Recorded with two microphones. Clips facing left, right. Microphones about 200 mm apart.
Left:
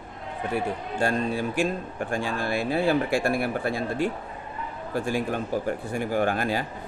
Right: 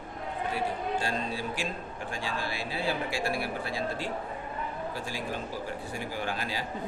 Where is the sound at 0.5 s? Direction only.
55° left (ahead or behind).